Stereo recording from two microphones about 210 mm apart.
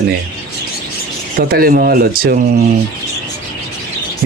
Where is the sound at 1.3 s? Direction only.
45° right (ahead or behind).